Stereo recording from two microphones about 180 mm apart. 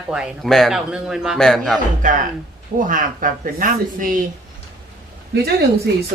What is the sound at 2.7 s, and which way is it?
Speech, 50° right (ahead or behind).